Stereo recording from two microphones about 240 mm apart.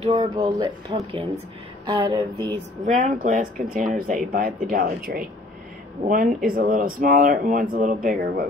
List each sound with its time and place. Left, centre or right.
0.0 s speech: right
2.8 s speech: right